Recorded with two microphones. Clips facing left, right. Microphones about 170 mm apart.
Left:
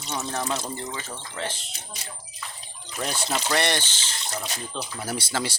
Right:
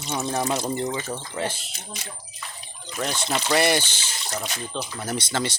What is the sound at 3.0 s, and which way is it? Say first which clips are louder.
Speech: right 2 dB; 10° left (ahead or behind).